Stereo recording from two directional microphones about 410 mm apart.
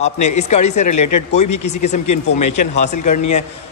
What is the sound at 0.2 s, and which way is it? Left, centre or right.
Speech, left.